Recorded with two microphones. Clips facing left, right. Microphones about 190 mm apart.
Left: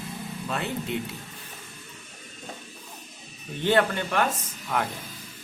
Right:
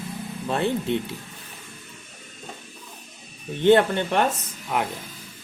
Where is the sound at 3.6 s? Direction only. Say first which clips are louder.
Right 6 dB; 25° right (ahead or behind).